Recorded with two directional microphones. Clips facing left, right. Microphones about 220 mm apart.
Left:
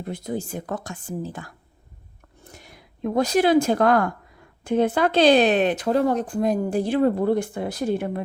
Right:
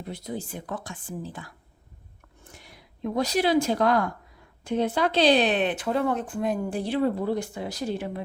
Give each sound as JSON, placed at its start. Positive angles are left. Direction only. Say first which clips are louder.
{"t": 0.0, "sound": "speech", "louder": "left 5 dB", "side_deg": 50}